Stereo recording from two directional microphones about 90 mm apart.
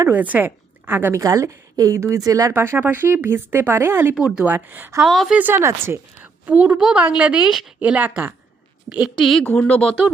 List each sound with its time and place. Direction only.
0.1 s a woman's voice: 20° right (ahead or behind)
1.2 s a woman's voice: 35° right (ahead or behind)
2.5 s speech: 25° right (ahead or behind)
4.1 s a woman's voice: 10° right (ahead or behind)
4.4 s speech: 20° right (ahead or behind)
5.0 s a woman's voice: centre (ahead or behind)
5.3 s speech: 20° right (ahead or behind)
5.5 s speech: 30° right (ahead or behind)
6.4 s a woman's voice: 15° right (ahead or behind)
6.7 s a woman's voice: 5° right (ahead or behind)
9.1 s a woman's voice: 5° left (ahead or behind)